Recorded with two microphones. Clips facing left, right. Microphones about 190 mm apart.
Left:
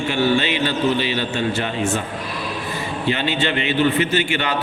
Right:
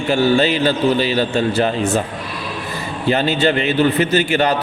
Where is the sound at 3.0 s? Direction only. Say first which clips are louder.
Right 6 dB; 40° right (ahead or behind).